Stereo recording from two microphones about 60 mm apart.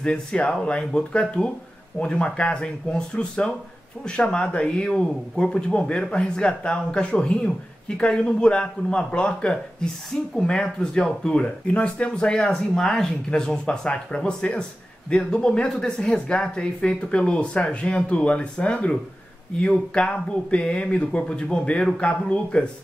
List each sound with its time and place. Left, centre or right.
0.0 s speech: centre